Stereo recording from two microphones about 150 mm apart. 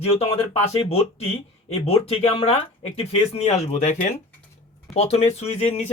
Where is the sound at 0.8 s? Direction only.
40° left (ahead or behind).